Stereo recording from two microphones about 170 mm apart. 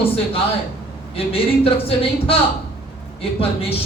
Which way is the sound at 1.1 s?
35° left (ahead or behind).